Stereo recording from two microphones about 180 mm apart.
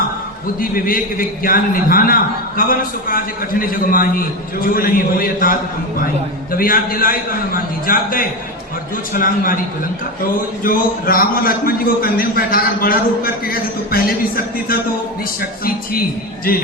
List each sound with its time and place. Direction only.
0.6 s a man's voice: 55° left (ahead or behind)
10.6 s a man's voice: 55° left (ahead or behind)